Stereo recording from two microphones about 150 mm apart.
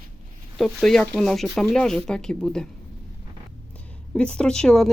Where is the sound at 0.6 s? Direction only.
5° left (ahead or behind).